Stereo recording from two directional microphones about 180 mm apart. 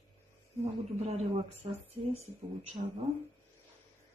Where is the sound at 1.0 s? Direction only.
35° right (ahead or behind).